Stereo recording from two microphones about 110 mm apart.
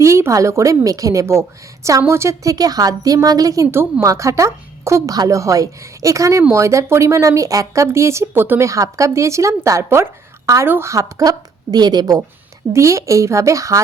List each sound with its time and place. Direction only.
0.0 s speech: 25° right (ahead or behind)
12.7 s speech: 25° right (ahead or behind)